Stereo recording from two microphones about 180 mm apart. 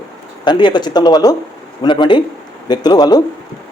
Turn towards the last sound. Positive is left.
turn(degrees=20)  # may be behind; listen again after turning